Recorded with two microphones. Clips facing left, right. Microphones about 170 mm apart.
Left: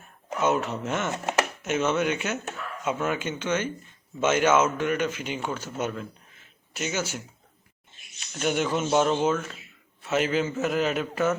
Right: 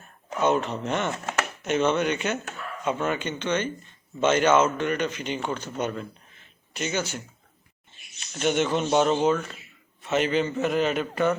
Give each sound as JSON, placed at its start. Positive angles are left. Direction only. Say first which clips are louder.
{"t": 0.3, "sound": "speech", "louder": "right 1 dB", "side_deg": 10}
{"t": 1.1, "sound": "chopping", "louder": "left 3 dB", "side_deg": 20}
{"t": 1.6, "sound": "a man's voice", "louder": "right 4 dB", "side_deg": 5}
{"t": 8.2, "sound": "speech", "louder": "right 2 dB", "side_deg": 0}